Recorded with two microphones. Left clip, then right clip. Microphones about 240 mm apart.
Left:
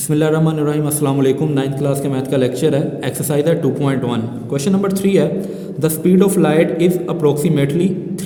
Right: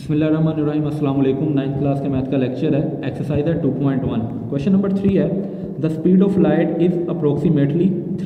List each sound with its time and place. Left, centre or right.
0.1 s a man's voice: left